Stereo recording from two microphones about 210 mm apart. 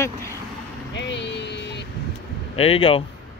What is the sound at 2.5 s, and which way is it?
Speech, 25° left (ahead or behind).